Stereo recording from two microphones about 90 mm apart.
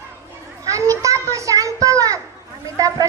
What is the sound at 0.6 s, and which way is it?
Children playing, 35° right (ahead or behind).